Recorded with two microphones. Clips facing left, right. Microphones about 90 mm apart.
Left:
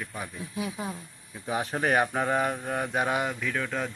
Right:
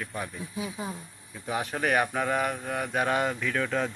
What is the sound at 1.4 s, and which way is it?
Speech, 25° left (ahead or behind).